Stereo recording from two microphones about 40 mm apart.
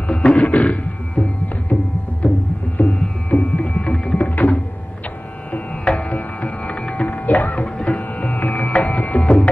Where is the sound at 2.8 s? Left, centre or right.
Left.